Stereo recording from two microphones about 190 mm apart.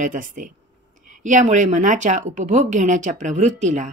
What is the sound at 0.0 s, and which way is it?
A woman's voice, 45° right (ahead or behind).